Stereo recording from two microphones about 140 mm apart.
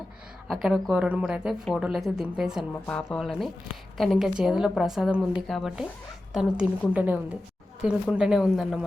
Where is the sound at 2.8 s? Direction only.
5° left (ahead or behind).